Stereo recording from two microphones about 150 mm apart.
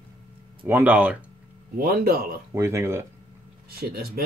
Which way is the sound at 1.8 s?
90° right.